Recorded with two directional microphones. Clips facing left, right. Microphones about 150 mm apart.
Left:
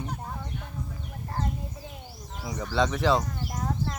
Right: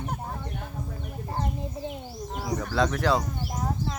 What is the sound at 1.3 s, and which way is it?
Chicken, 20° right (ahead or behind).